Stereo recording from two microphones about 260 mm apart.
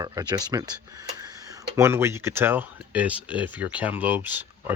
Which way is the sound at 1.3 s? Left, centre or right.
Centre.